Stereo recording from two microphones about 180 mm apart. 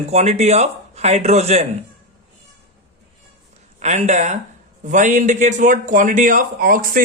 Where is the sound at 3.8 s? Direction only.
40° right (ahead or behind).